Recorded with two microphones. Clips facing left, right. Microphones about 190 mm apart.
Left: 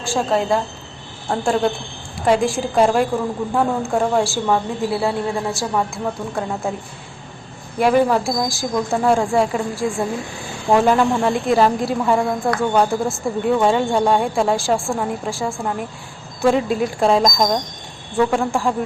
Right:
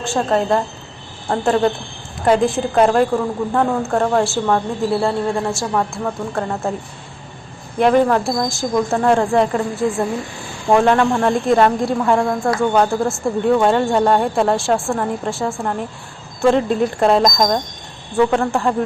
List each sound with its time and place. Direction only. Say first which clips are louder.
0.2 s speech: right 2 dB; 5° left (ahead or behind)
7.8 s speech: right 2 dB; 5° left (ahead or behind)